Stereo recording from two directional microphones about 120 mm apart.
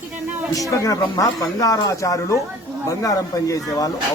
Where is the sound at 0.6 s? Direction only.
25° left (ahead or behind).